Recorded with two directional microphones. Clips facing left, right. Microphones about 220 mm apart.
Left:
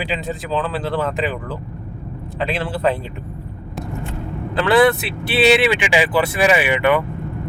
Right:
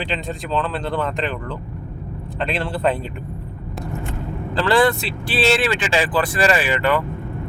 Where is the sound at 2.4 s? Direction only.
Centre (ahead or behind).